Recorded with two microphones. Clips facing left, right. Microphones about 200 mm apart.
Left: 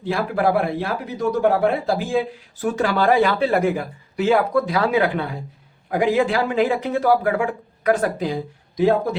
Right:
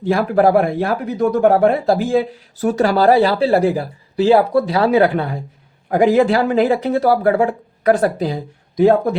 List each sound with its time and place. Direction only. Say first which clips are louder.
0.1 s speech: right 6 dB; 40° right (ahead or behind)